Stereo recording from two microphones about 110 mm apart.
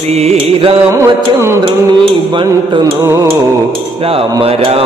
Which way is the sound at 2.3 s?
45° right (ahead or behind).